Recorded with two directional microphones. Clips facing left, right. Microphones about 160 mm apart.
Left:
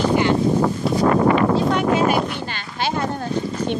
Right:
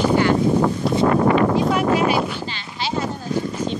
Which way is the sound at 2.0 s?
55° left (ahead or behind).